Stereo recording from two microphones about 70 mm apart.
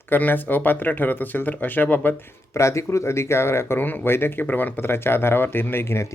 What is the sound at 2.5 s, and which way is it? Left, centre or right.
Speech, left.